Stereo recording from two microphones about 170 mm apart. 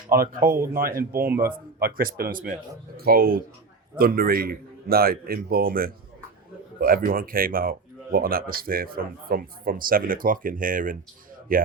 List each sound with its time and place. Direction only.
0.1 s speech: 60° right (ahead or behind)
0.5 s speech: 15° right (ahead or behind)
1.8 s speech: 60° right (ahead or behind)